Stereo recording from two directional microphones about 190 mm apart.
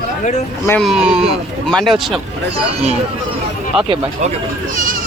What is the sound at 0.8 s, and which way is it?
Speech, 5° right (ahead or behind).